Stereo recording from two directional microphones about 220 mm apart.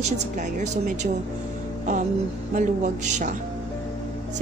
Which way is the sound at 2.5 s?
35° right (ahead or behind).